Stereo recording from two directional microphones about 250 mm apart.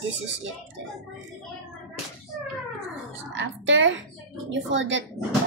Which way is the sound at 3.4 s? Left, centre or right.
Right.